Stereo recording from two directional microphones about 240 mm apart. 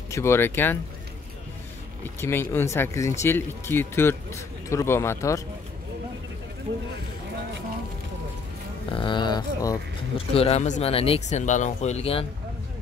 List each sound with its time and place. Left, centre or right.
0.1 s speech: centre
2.0 s speech: centre
8.9 s speech: centre